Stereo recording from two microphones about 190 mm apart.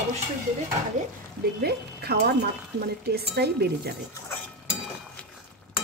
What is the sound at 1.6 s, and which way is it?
Speech, 60° right (ahead or behind).